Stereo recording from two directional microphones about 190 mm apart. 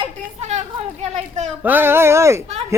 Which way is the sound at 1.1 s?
35° right (ahead or behind).